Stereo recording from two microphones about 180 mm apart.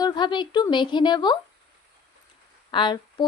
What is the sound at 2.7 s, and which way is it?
Speech, 25° left (ahead or behind).